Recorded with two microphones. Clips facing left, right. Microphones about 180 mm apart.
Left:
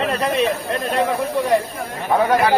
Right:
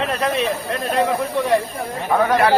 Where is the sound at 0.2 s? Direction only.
Centre (ahead or behind).